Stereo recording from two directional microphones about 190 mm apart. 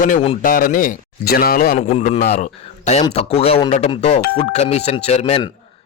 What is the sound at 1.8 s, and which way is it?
Speech, 35° left (ahead or behind).